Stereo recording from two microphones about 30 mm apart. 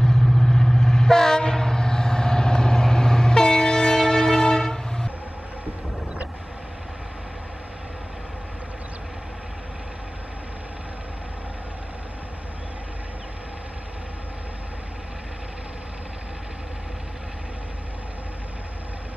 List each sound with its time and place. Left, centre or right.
0.0 s train: centre